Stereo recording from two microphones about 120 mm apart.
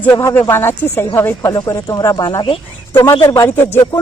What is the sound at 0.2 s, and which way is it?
Speech, 25° left (ahead or behind).